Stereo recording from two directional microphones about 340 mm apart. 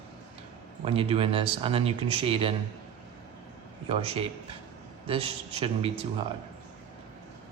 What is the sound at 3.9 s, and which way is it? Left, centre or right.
A man's voice, centre.